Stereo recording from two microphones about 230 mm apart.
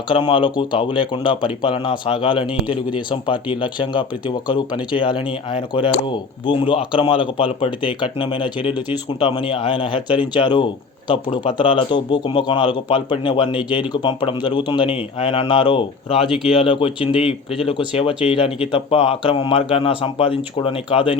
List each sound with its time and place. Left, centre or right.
0.1 s speech: left
16.2 s speech: centre
16.5 s speech: left
17.2 s speech: centre
18.3 s speech: left